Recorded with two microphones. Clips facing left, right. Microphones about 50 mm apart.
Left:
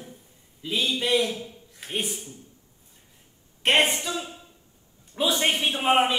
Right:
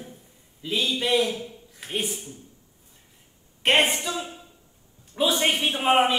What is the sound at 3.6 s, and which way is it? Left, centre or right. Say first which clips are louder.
Speech: right 1 dB; centre.